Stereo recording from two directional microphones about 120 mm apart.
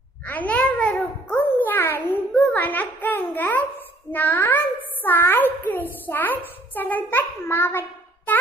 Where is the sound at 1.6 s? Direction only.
15° left (ahead or behind).